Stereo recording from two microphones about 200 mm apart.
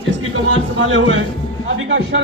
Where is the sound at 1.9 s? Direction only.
60° right (ahead or behind).